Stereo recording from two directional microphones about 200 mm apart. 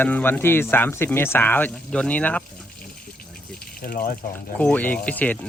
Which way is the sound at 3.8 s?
45° left (ahead or behind).